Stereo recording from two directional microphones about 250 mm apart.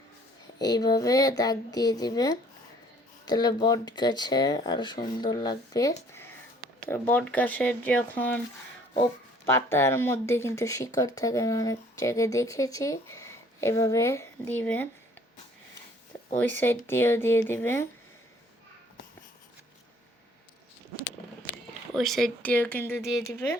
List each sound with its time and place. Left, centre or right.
0.6 s speech: centre
9.5 s speech: centre
16.4 s speech: centre
21.9 s speech: centre